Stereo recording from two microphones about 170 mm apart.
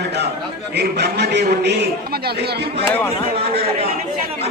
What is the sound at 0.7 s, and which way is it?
A man's voice, 80° right.